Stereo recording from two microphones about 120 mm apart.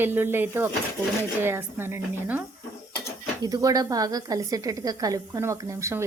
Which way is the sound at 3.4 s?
30° right (ahead or behind).